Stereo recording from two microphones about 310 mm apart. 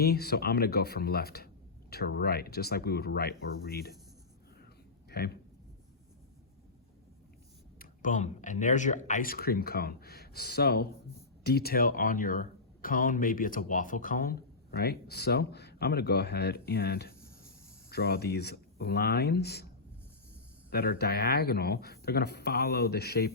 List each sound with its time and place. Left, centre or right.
0.0 s speech: left
5.0 s speech: left
7.8 s speech: left
20.7 s speech: left